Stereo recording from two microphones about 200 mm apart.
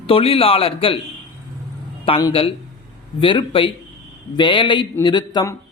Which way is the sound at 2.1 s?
15° left (ahead or behind).